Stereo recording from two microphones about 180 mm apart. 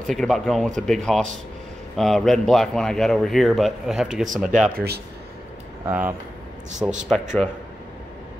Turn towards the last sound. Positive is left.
turn(degrees=0)  # may be behind; listen again after turning